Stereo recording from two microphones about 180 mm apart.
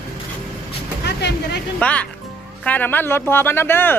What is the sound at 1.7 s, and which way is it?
Speech, 5° left (ahead or behind).